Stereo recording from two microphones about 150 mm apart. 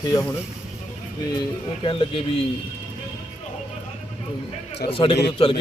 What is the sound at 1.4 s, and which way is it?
Speech, 35° left (ahead or behind).